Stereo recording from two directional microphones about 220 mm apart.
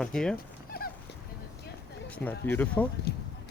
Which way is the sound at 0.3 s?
45° left (ahead or behind).